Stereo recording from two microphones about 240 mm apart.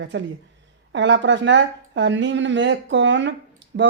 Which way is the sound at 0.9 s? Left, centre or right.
Right.